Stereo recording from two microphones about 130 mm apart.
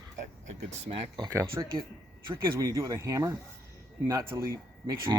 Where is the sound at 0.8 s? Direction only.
45° right (ahead or behind).